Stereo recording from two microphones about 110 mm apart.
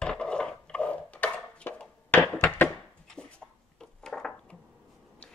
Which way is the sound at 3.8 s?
5° left (ahead or behind).